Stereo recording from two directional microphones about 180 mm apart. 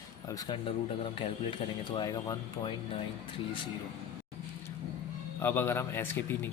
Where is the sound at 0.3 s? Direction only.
25° left (ahead or behind).